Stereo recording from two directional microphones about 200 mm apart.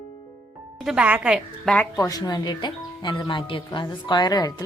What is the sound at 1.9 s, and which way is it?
Speech, 15° left (ahead or behind).